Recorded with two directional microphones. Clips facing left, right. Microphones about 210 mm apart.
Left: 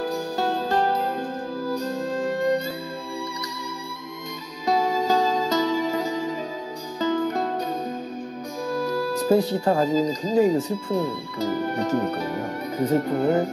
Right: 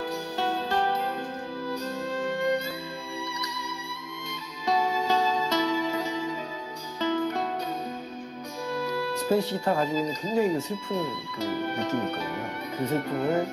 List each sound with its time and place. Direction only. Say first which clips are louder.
0.0 s music: left 5 dB; 40° left (ahead or behind)
4.6 s music: left 4 dB; 40° left (ahead or behind)
8.6 s speech: left 4 dB; 40° left (ahead or behind)